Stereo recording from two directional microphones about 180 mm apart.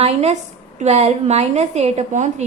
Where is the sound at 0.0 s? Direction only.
35° right (ahead or behind).